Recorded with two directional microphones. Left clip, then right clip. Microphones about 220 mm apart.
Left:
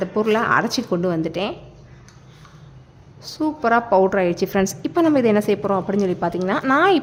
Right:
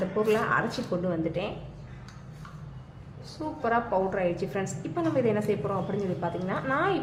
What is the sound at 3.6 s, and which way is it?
A woman's voice, 45° left (ahead or behind).